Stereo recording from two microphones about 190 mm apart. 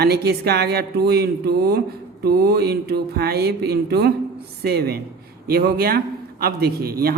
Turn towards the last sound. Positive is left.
turn(degrees=-55)  # may be behind; listen again after turning